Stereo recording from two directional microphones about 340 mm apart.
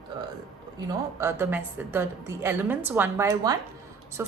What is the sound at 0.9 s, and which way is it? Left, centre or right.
A woman's voice, centre.